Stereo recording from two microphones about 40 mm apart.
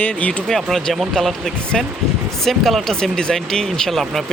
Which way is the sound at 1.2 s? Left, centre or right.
Left.